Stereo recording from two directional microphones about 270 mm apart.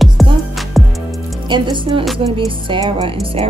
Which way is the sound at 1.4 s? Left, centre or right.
Centre.